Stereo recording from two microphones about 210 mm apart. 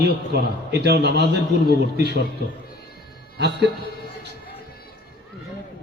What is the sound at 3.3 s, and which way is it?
Speech, 55° right (ahead or behind).